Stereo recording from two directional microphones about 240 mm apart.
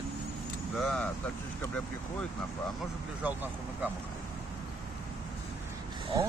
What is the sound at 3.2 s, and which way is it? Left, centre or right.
Speech, centre.